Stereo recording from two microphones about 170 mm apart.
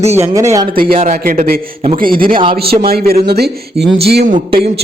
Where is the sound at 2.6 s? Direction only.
65° right (ahead or behind).